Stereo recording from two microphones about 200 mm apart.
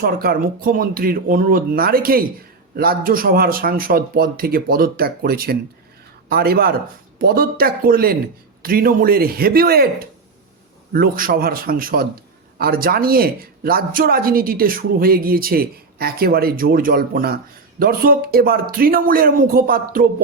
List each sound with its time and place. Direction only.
0.0 s speech: 50° right (ahead or behind)
10.9 s speech: 45° right (ahead or behind)